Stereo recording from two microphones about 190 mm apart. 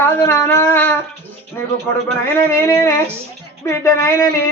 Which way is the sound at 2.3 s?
15° left (ahead or behind).